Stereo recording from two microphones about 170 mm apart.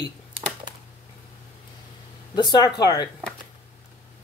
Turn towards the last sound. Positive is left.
turn(degrees=25)  # may be behind; listen again after turning